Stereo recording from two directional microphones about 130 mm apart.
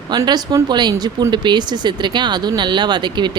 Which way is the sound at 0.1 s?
30° right (ahead or behind).